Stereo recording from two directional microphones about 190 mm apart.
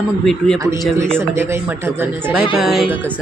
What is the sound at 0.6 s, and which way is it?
Speech, 15° right (ahead or behind).